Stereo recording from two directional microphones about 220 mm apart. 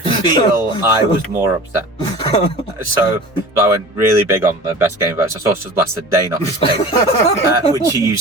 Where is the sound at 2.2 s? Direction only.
25° left (ahead or behind).